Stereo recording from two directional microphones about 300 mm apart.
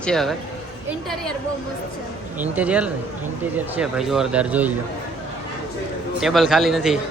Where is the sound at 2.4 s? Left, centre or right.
Centre.